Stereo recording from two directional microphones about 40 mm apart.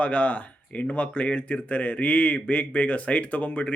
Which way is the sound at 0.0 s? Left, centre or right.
Left.